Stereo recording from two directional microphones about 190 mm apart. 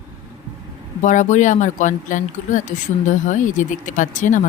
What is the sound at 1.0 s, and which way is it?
Speech, 40° left (ahead or behind).